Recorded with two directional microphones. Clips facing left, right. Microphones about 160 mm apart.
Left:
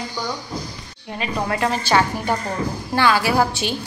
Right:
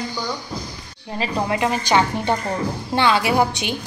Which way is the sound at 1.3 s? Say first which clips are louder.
Even; 20° right (ahead or behind).